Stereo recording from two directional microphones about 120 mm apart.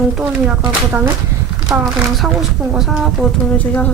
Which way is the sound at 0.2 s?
5° right (ahead or behind).